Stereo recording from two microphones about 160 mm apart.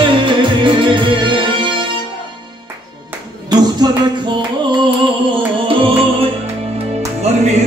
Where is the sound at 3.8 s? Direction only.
25° right (ahead or behind).